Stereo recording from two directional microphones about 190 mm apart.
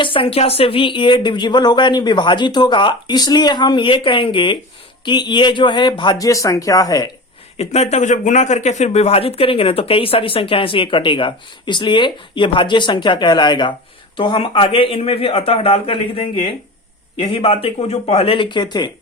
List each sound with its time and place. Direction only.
0.0 s speech: 30° left (ahead or behind)
7.5 s speech: 35° left (ahead or behind)